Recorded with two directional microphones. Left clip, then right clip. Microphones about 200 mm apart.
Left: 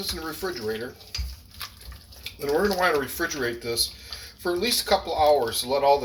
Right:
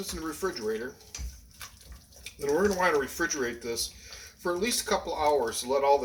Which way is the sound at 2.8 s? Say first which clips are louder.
Left 3 dB; 25° right (ahead or behind).